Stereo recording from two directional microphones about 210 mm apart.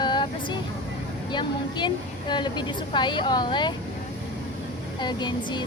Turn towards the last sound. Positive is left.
turn(degrees=20)  # may be behind; listen again after turning